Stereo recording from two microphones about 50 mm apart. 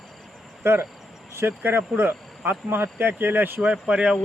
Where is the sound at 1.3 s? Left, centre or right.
Right.